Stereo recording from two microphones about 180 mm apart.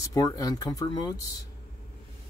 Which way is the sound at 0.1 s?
20° left (ahead or behind).